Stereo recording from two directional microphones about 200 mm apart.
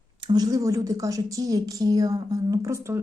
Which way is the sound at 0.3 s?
20° right (ahead or behind).